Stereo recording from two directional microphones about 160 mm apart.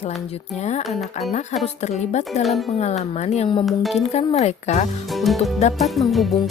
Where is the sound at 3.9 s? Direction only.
45° left (ahead or behind).